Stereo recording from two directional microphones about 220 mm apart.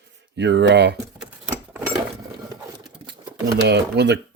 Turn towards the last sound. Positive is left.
turn(degrees=-50)  # may be behind; listen again after turning